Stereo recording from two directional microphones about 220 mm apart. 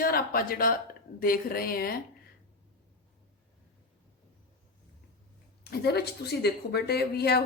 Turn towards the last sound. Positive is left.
turn(degrees=45)  # may be behind; listen again after turning